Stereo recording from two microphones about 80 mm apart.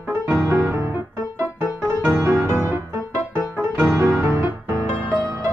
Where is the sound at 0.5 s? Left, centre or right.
Right.